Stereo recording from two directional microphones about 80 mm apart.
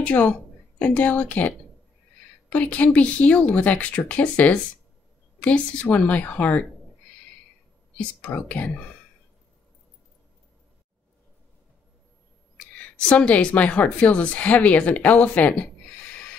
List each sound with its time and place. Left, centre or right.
0.0 s a woman's voice: centre
2.5 s a woman's voice: centre
8.2 s a woman's voice: centre
12.5 s a woman's voice: centre